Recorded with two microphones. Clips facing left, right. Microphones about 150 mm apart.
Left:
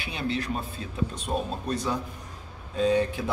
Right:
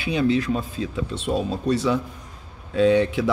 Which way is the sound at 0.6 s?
90° right.